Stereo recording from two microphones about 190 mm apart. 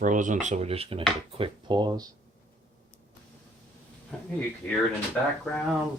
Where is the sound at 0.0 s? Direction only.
40° right (ahead or behind); by 2.0 s 20° right (ahead or behind).